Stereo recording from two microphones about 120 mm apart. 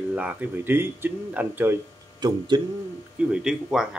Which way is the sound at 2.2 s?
35° right (ahead or behind).